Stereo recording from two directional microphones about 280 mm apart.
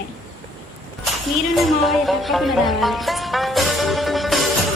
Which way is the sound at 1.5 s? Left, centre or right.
Centre.